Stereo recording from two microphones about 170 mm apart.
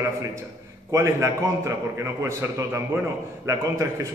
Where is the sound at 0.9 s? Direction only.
15° right (ahead or behind).